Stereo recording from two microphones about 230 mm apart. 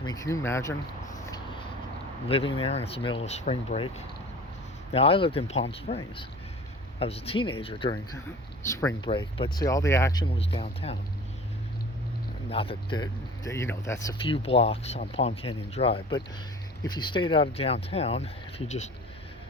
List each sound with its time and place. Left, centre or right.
0.0 s a sound: centre
2.2 s speech: left
7.0 s speech: left
12.5 s speech: left
14.3 s speech: left